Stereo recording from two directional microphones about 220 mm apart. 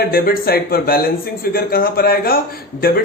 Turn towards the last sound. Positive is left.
turn(degrees=45)  # may be behind; listen again after turning